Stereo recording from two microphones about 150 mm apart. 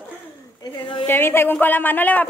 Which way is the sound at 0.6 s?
30° left (ahead or behind).